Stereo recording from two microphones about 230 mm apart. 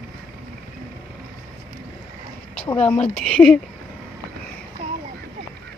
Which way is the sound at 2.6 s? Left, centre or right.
Left.